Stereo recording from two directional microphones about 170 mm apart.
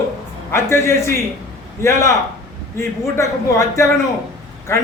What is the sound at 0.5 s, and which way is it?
A man's voice, 15° left (ahead or behind).